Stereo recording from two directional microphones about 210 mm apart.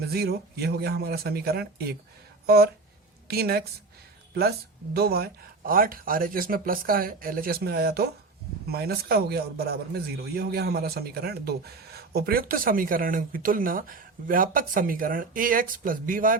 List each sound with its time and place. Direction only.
0.1 s speech: 50° right (ahead or behind)
3.2 s speech: 50° right (ahead or behind)
4.9 s speech: 50° right (ahead or behind)